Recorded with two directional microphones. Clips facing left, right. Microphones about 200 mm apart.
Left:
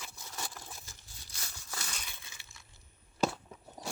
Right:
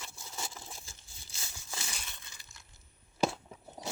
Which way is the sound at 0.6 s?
25° right (ahead or behind).